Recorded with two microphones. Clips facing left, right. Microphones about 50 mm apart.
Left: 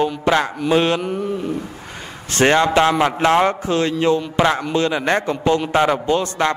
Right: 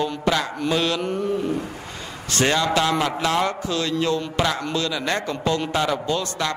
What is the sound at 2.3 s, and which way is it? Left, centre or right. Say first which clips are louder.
A man's voice: left 6 dB; left.